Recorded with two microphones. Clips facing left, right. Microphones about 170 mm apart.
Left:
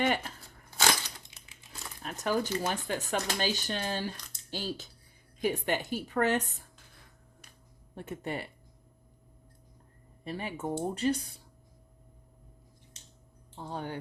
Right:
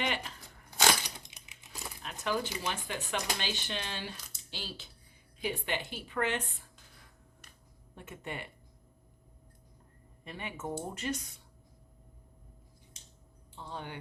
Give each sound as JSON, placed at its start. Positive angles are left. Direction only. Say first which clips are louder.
{"t": 0.0, "sound": "speech", "louder": "left 6 dB", "side_deg": 45}
{"t": 0.8, "sound": "a sound", "louder": "even", "side_deg": -15}
{"t": 2.0, "sound": "speech", "louder": "left 4 dB", "side_deg": 45}
{"t": 7.9, "sound": "speech", "louder": "left 6 dB", "side_deg": 35}
{"t": 10.2, "sound": "speech", "louder": "left 5 dB", "side_deg": 35}
{"t": 13.6, "sound": "speech", "louder": "left 5 dB", "side_deg": 40}